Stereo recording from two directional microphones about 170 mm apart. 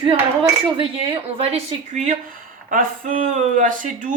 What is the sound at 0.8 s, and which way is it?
Speech, 35° right (ahead or behind).